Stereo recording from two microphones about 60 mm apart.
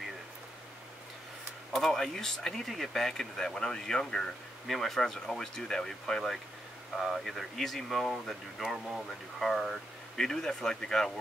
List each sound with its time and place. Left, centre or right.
1.7 s speech: centre